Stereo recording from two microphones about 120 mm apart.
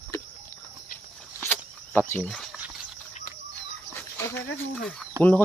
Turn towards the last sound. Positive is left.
turn(degrees=-20)  # may be behind; listen again after turning